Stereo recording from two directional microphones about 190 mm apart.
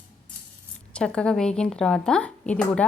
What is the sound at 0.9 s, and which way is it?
Speech, 5° left (ahead or behind).